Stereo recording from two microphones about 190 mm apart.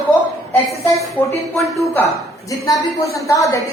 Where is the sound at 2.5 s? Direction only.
15° left (ahead or behind).